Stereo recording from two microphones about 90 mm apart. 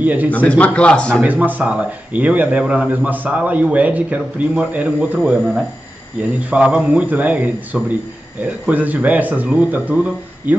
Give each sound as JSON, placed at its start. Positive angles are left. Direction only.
{"t": 0.0, "sound": "a man's voice", "side_deg": -20}
{"t": 0.3, "sound": "a man's voice", "side_deg": 15}
{"t": 1.2, "sound": "a man's voice", "side_deg": -20}